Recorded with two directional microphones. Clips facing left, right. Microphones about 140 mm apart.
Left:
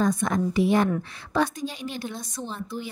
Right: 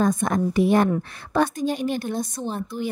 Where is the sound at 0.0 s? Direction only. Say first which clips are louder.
Right 2 dB; 50° right (ahead or behind).